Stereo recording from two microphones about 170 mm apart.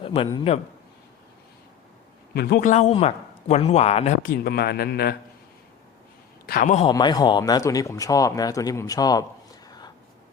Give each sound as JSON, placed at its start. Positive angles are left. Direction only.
{"t": 0.0, "sound": "a man's voice", "side_deg": 30}
{"t": 2.3, "sound": "speech", "side_deg": 70}
{"t": 2.6, "sound": "speech", "side_deg": 40}
{"t": 4.2, "sound": "speech", "side_deg": 65}
{"t": 6.4, "sound": "a man's voice", "side_deg": 60}
{"t": 6.9, "sound": "speech", "side_deg": 25}
{"t": 9.6, "sound": "a sound", "side_deg": 25}